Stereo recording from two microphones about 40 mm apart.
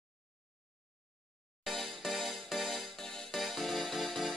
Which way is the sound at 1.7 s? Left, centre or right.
Centre.